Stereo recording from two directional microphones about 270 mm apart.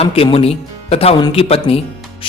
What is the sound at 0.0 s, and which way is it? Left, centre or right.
Speech, left.